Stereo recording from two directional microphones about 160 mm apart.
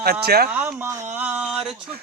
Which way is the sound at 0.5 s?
10° right (ahead or behind).